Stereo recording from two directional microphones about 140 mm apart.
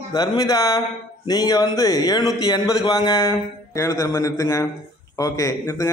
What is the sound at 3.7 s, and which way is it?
A man's voice, 25° left (ahead or behind).